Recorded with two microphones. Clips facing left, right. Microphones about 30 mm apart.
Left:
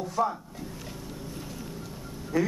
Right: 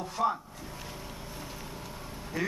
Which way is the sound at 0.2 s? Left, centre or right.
Centre.